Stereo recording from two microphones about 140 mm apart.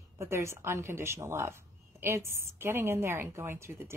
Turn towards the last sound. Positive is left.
turn(degrees=-20)  # may be behind; listen again after turning